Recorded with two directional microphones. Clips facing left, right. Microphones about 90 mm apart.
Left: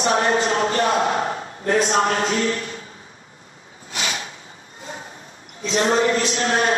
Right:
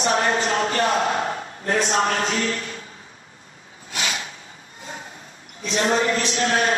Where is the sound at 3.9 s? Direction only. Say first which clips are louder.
Even; 30° left (ahead or behind).